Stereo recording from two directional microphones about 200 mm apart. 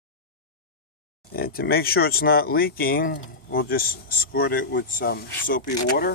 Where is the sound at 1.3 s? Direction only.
50° left (ahead or behind).